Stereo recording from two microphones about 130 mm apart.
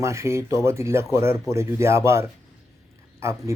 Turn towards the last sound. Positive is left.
turn(degrees=-20)  # may be behind; listen again after turning